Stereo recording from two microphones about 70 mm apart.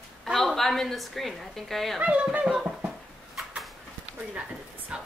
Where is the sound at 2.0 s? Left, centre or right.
Centre.